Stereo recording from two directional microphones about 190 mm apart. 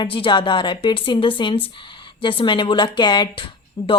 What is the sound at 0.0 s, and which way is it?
A woman's voice, 25° left (ahead or behind).